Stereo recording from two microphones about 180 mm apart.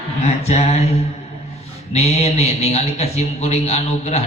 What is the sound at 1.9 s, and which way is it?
A man's voice, 35° left (ahead or behind).